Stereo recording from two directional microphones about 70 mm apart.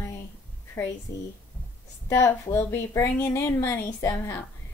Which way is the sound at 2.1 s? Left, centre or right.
Left.